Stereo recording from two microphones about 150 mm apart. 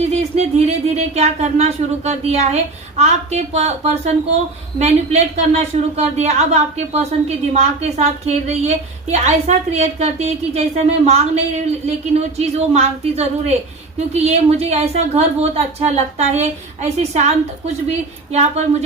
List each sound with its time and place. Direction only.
0.0 s a woman's voice: 45° right (ahead or behind)